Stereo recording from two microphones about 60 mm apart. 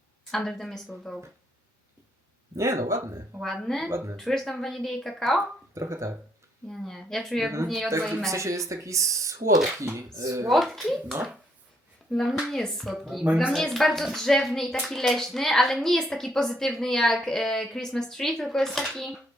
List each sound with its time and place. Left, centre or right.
0.3 s speech: centre
2.6 s speech: right
3.4 s a woman's voice: centre
3.8 s speech: right
4.2 s a woman's voice: centre
5.7 s speech: right
6.7 s a woman's voice: centre
8.3 s speech: right
10.5 s a woman's voice: centre
12.1 s a woman's voice: centre